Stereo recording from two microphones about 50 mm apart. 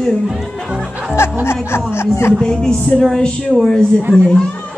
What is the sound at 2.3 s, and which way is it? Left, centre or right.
Speech, centre.